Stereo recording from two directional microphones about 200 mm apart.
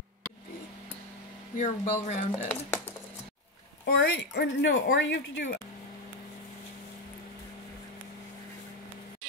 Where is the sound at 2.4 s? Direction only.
10° left (ahead or behind).